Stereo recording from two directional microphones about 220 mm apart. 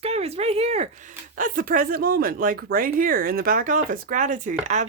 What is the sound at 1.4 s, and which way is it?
Speech, 40° right (ahead or behind).